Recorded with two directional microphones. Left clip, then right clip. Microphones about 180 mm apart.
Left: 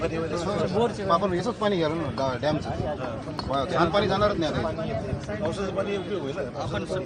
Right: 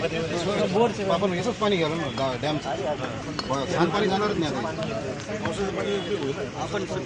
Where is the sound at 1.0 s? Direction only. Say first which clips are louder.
Left 1 dB; centre (ahead or behind).